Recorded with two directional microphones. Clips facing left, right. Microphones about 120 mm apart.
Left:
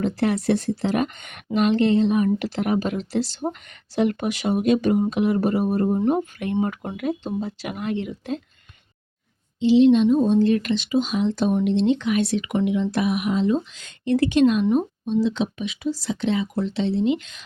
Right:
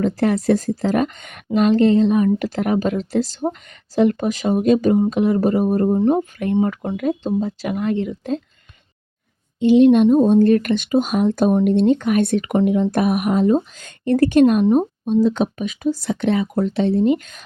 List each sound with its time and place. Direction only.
0.0 s speech: 40° right (ahead or behind)
9.6 s speech: 55° right (ahead or behind)